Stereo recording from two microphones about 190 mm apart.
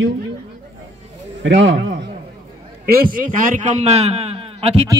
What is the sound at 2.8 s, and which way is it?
A man's voice, 50° right (ahead or behind).